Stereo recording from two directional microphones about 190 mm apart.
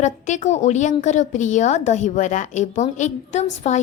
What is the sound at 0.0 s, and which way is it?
A woman's voice, 40° left (ahead or behind).